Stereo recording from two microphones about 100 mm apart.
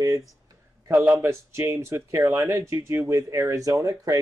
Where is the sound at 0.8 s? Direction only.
20° right (ahead or behind); by 4.2 s 35° right (ahead or behind).